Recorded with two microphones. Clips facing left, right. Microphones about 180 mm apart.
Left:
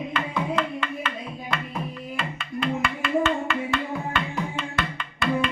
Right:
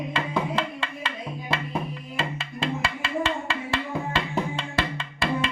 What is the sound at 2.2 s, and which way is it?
Music, 25° right (ahead or behind).